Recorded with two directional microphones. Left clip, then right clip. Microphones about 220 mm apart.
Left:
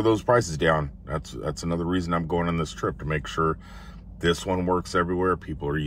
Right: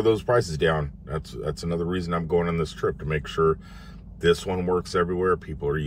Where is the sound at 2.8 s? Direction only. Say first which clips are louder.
Right 2 dB; 20° left (ahead or behind).